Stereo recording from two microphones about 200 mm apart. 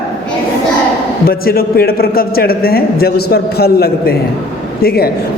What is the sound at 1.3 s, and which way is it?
A man's voice, 50° left (ahead or behind).